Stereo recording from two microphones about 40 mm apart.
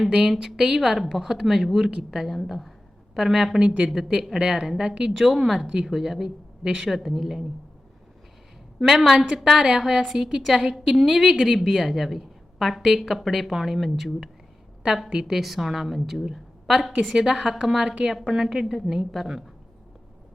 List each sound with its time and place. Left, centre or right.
0.2 s a woman's voice: centre
5.1 s a woman's voice: centre
8.8 s a woman's voice: centre
9.1 s a woman's voice: right
15.3 s a woman's voice: centre